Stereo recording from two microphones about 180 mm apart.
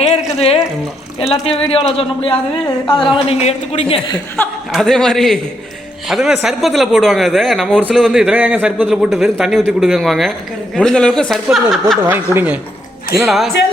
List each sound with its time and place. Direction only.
0.3 s water: 35° left (ahead or behind)
1.2 s a woman's voice: 35° left (ahead or behind)
4.7 s speech: centre (ahead or behind)
12.0 s speech: 10° right (ahead or behind)